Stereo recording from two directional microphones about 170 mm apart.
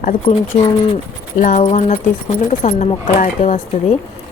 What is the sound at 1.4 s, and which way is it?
Speech, 45° left (ahead or behind).